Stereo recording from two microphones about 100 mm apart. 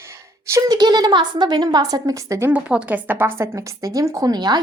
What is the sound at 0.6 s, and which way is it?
A woman's voice, 45° right (ahead or behind).